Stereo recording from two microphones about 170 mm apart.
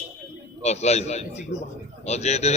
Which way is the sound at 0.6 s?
40° left (ahead or behind).